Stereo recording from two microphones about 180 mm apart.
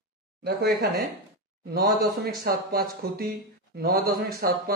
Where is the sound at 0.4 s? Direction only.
60° right (ahead or behind).